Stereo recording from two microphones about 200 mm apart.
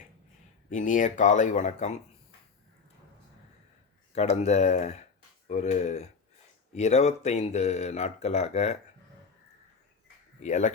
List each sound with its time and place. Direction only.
0.7 s speech: 40° left (ahead or behind)
4.1 s speech: 35° left (ahead or behind)
10.4 s speech: 35° left (ahead or behind)